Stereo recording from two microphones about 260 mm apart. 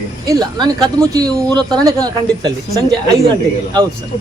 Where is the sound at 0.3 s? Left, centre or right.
Centre.